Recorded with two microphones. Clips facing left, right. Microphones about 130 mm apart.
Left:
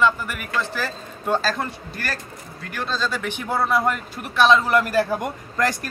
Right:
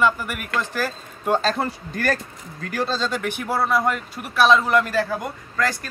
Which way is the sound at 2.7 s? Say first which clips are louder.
Right 2 dB; 35° right (ahead or behind).